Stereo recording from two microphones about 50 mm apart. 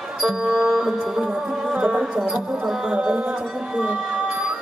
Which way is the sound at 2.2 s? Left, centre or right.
Centre.